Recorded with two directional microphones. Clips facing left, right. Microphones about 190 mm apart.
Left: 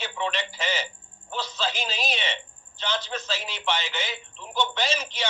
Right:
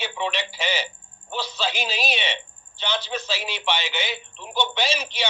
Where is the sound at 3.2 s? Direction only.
70° right (ahead or behind).